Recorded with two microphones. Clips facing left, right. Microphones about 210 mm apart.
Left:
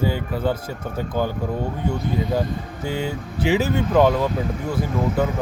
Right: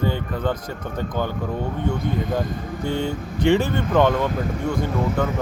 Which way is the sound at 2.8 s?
5° left (ahead or behind).